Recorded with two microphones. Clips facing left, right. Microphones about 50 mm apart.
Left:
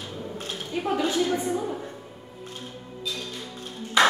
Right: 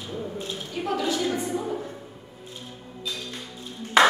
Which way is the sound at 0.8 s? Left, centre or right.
Centre.